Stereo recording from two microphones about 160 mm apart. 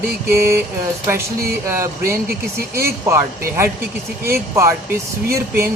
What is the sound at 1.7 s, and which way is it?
Speech, 15° right (ahead or behind).